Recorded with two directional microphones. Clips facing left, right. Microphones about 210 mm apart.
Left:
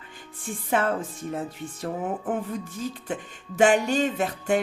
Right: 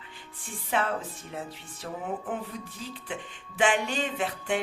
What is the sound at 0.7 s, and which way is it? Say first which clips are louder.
Music: left 4 dB; 50° left (ahead or behind).